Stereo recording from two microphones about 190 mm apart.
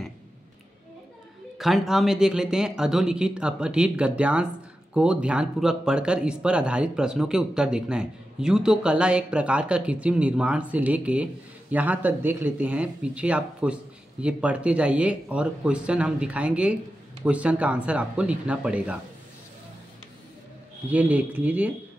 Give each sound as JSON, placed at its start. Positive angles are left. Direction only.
{"t": 1.6, "sound": "speech", "side_deg": 0}
{"t": 20.9, "sound": "speech", "side_deg": -10}